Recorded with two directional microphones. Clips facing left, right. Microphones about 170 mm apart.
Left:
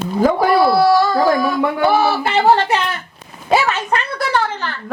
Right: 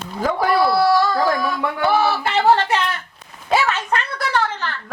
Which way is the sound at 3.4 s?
10° left (ahead or behind).